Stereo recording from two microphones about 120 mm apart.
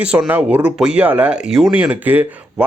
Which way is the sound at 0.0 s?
10° right (ahead or behind).